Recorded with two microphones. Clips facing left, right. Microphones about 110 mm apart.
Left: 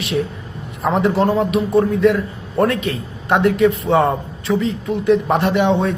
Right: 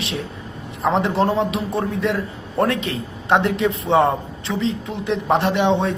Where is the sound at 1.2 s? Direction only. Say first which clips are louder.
Left 3 dB; 30° right (ahead or behind).